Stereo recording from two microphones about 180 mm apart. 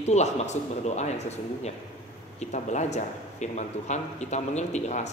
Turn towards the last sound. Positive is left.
turn(degrees=40)  # may be behind; listen again after turning